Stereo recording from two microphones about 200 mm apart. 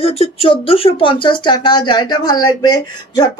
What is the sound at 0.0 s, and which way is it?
Speech, 30° left (ahead or behind).